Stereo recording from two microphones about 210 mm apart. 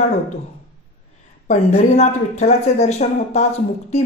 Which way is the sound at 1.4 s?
30° left (ahead or behind).